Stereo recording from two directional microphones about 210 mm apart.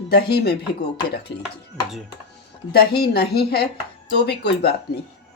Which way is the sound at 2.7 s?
50° left (ahead or behind).